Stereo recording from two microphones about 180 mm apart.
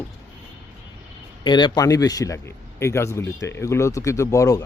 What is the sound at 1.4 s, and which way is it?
Speech, 25° left (ahead or behind).